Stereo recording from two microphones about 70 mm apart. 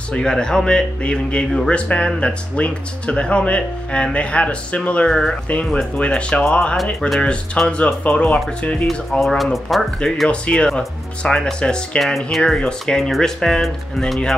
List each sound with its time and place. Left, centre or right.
0.1 s speech: centre
6.8 s speech: centre
7.2 s speech: centre
9.2 s speech: centre
10.3 s speech: centre